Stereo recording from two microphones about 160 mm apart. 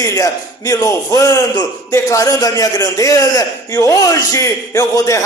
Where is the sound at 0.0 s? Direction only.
20° left (ahead or behind).